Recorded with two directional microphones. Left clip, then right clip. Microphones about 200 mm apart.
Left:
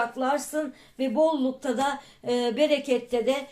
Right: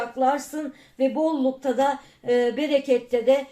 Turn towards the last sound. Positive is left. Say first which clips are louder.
# right 5 dB
turn(degrees=35)  # may be behind; listen again after turning